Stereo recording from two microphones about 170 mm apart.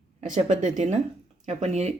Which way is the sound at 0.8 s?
45° right (ahead or behind).